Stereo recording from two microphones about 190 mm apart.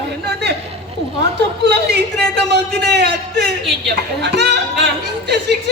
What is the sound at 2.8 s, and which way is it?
Speech, 60° right (ahead or behind).